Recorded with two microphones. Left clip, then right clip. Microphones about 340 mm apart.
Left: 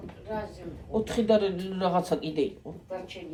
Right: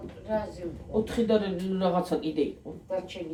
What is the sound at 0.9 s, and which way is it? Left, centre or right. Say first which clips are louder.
Speech: left 1 dB; left.